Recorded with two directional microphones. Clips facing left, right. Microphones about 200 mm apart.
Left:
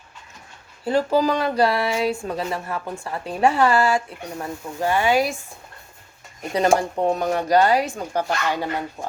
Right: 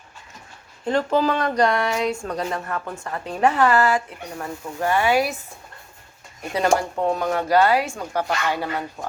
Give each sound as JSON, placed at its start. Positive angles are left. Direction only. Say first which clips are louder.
{"t": 0.9, "sound": "speech", "louder": "left 1 dB", "side_deg": 10}
{"t": 6.7, "sound": "speech", "louder": "left 1 dB", "side_deg": 20}